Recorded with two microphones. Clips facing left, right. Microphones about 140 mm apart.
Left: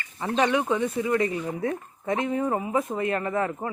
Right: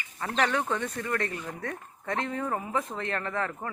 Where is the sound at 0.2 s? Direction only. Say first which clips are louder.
Left 4 dB; 15° left (ahead or behind).